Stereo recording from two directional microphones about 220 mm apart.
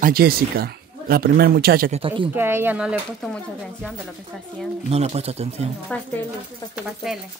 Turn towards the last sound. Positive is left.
turn(degrees=0)  # may be behind; listen again after turning